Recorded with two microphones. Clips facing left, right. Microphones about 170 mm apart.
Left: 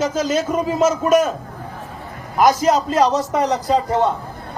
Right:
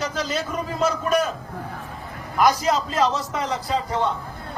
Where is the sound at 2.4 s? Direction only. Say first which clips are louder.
Left 5 dB; 45° left (ahead or behind).